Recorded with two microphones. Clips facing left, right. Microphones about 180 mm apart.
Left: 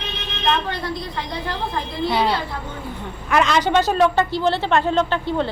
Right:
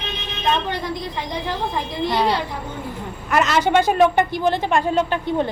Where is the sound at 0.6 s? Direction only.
15° right (ahead or behind).